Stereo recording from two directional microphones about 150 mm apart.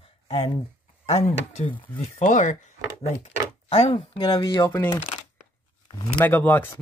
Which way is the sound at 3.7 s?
45° left (ahead or behind).